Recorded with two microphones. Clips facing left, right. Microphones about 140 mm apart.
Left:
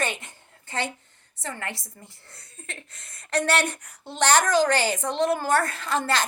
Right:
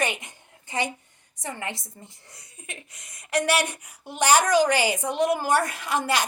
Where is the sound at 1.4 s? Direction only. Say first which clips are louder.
Right 1 dB; 15° right (ahead or behind).